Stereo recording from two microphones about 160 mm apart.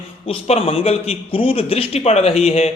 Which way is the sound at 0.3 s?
35° left (ahead or behind).